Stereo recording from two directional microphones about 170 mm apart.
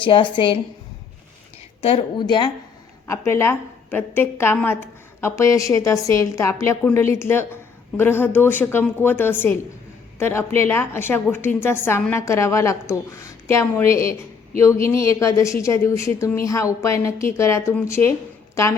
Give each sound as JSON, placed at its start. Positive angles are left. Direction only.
{"t": 0.0, "sound": "a woman's voice", "side_deg": 30}
{"t": 1.8, "sound": "a woman's voice", "side_deg": 35}
{"t": 3.1, "sound": "a woman's voice", "side_deg": 15}